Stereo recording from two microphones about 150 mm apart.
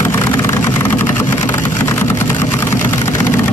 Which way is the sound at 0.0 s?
15° left (ahead or behind).